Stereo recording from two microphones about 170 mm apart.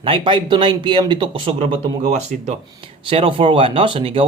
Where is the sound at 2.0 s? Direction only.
45° right (ahead or behind).